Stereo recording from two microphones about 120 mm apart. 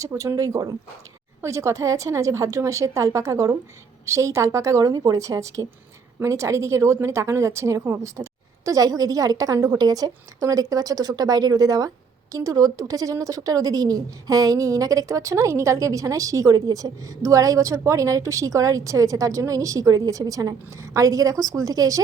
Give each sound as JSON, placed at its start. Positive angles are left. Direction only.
{"t": 0.0, "sound": "speech", "side_deg": -25}